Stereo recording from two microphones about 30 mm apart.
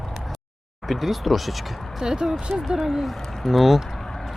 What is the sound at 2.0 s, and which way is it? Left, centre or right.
Speech, right.